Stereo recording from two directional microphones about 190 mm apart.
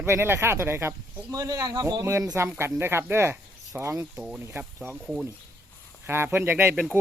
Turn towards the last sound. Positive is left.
turn(degrees=-10)  # may be behind; listen again after turning